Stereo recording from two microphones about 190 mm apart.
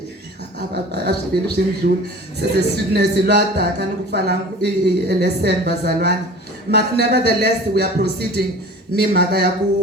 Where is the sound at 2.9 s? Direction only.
60° right (ahead or behind).